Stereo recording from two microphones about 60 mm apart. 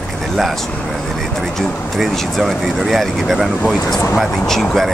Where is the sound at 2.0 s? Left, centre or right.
Centre.